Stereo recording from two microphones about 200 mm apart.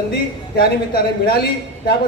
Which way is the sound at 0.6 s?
50° left (ahead or behind).